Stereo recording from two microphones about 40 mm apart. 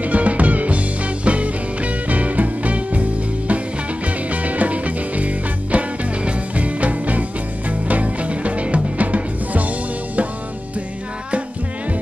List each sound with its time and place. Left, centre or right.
0.0 s music: right